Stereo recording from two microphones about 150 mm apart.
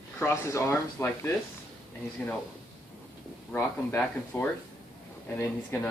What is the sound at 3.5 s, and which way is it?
Speech, 15° left (ahead or behind).